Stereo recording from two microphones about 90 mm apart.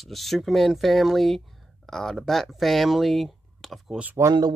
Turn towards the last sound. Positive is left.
turn(degrees=-45)  # may be behind; listen again after turning